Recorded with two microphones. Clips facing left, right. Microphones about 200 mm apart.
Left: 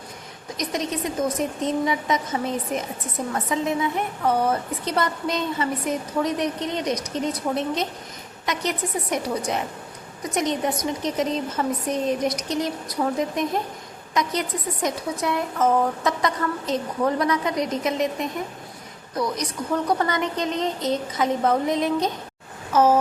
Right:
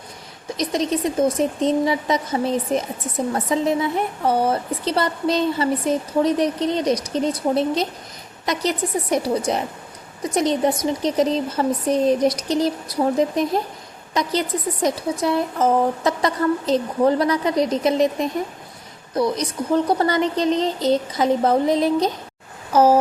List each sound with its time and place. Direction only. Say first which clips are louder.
0.5 s a woman's voice: right 5 dB; 30° right (ahead or behind)